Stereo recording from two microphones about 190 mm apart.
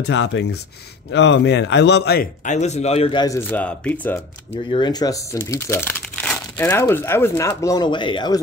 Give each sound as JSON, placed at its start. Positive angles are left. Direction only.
{"t": 0.0, "sound": "a man's voice", "side_deg": 70}
{"t": 2.4, "sound": "a man's voice", "side_deg": 35}
{"t": 3.3, "sound": "speech", "side_deg": 10}
{"t": 4.6, "sound": "speech", "side_deg": 25}